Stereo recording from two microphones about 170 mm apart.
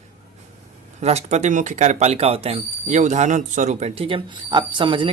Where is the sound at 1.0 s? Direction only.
40° right (ahead or behind).